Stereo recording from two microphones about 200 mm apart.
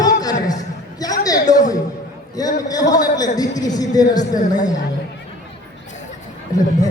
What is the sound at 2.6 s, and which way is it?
A man's voice, 20° left (ahead or behind).